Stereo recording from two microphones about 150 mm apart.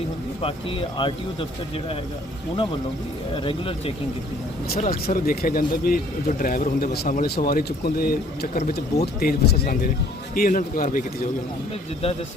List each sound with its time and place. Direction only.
0.4 s speech: 35° left (ahead or behind)
3.3 s speech: 35° left (ahead or behind)
4.9 s speech: 80° left
10.3 s a man's voice: 70° left (ahead or behind)